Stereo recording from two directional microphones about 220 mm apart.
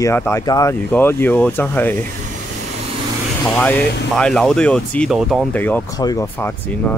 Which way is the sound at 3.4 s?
5° left (ahead or behind).